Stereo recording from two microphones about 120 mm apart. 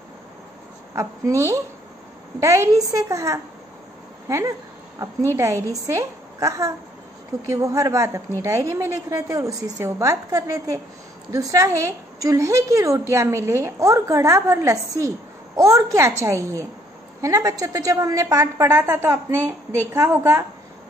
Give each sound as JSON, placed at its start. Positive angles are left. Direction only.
{"t": 0.9, "sound": "a woman's voice", "side_deg": -25}